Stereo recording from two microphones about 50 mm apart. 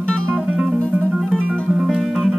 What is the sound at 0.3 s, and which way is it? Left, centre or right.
Music, right.